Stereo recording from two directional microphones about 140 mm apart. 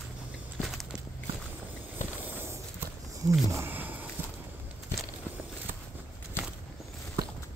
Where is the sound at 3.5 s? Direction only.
15° right (ahead or behind).